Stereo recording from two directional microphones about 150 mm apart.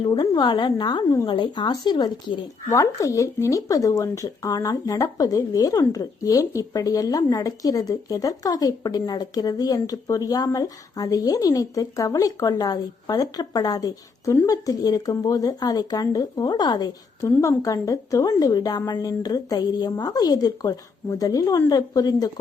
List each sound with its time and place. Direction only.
0.0 s a woman's voice: 35° left (ahead or behind)